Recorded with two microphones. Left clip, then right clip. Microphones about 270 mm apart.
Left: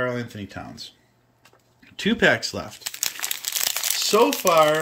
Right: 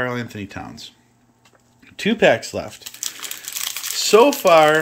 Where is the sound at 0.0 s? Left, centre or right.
Centre.